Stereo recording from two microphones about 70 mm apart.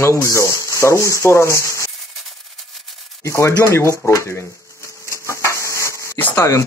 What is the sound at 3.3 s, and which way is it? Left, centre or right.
Speech, left.